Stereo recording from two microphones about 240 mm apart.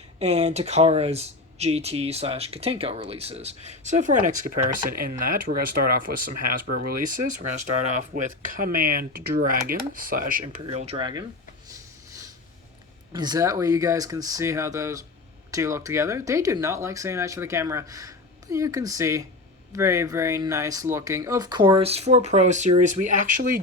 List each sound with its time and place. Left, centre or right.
0.2 s speech: right
10.4 s speech: right
13.1 s speech: centre